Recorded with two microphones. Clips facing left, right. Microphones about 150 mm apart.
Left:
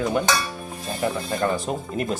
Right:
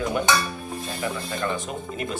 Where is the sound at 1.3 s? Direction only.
40° left (ahead or behind).